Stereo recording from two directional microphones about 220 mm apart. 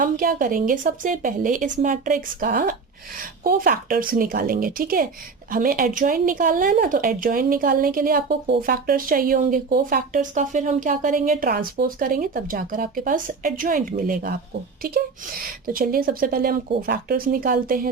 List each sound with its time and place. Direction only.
0.0 s speech: 40° right (ahead or behind)
14.8 s a sound: 40° right (ahead or behind)
15.6 s speech: 40° right (ahead or behind)